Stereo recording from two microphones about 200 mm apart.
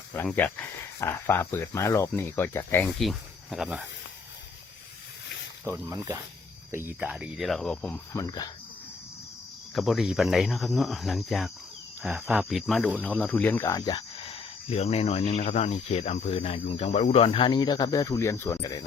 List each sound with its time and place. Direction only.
0.1 s speech: 10° left (ahead or behind)
5.6 s speech: 15° right (ahead or behind)
6.7 s cricket: 10° right (ahead or behind)
8.1 s speech: 20° left (ahead or behind)
9.7 s cricket: centre (ahead or behind)
12.0 s speech: centre (ahead or behind); by 18.9 s 20° left (ahead or behind)